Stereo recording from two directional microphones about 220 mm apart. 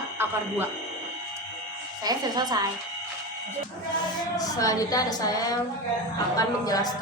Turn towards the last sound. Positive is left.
turn(degrees=15)  # may be behind; listen again after turning